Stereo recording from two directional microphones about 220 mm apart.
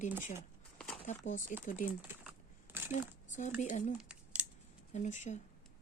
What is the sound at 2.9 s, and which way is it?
Speech, 35° left (ahead or behind).